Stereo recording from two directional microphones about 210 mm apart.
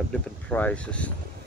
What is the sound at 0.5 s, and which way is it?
Speech, 5° left (ahead or behind).